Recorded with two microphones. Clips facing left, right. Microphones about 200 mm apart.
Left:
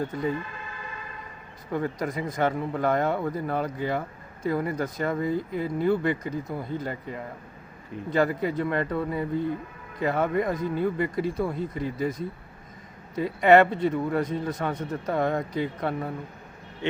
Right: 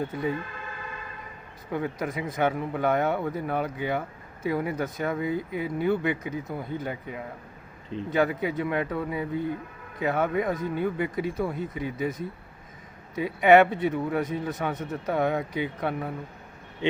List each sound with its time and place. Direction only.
0.0 s a man's voice: 5° right (ahead or behind)
1.7 s a man's voice: 5° right (ahead or behind)
16.8 s speech: 15° right (ahead or behind)